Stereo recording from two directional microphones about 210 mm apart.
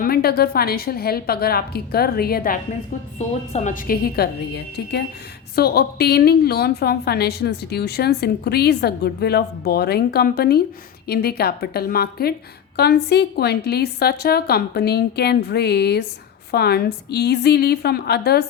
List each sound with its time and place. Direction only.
0.0 s a woman's voice: 45° left (ahead or behind)
3.2 s a woman's voice: 35° left (ahead or behind); by 18.4 s 50° left (ahead or behind)